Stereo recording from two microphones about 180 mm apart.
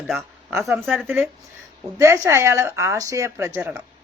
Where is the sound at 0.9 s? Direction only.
10° right (ahead or behind).